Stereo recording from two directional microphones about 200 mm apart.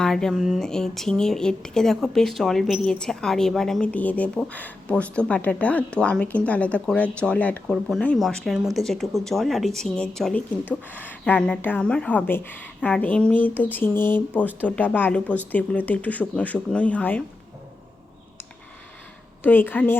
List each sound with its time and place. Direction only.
0.0 s speech: 5° left (ahead or behind)
19.4 s speech: 10° left (ahead or behind)